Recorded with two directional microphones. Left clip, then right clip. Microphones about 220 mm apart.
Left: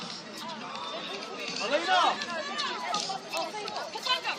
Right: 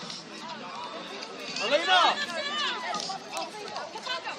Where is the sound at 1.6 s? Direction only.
25° right (ahead or behind).